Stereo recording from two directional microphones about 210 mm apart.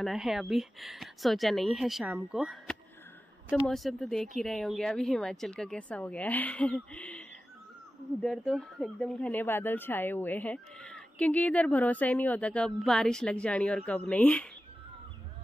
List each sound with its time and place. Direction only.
0.0 s speech: centre (ahead or behind)